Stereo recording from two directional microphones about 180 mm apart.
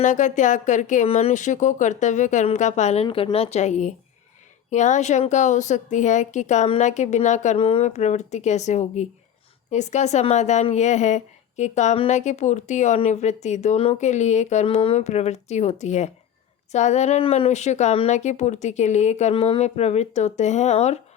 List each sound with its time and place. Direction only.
0.0 s a woman's voice: 45° left (ahead or behind)